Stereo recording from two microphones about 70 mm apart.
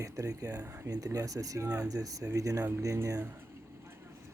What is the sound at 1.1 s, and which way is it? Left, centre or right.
Speech, right.